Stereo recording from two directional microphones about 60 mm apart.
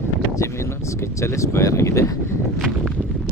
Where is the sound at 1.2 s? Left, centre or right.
Left.